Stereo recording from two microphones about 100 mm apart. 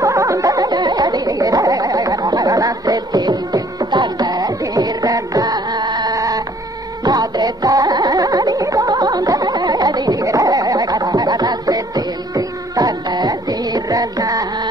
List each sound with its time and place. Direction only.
0.0 s a sound: 35° right (ahead or behind)
6.1 s chicken: 35° right (ahead or behind)
7.1 s music: 40° right (ahead or behind)